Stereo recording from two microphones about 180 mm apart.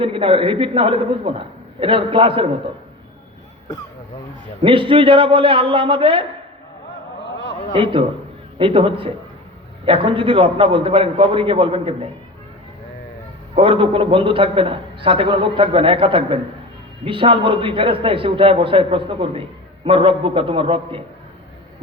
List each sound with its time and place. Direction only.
0.0 s a man's voice: 30° right (ahead or behind)
4.6 s a man's voice: 30° right (ahead or behind)
8.5 s a man's voice: 30° right (ahead or behind)
13.6 s a man's voice: 30° right (ahead or behind)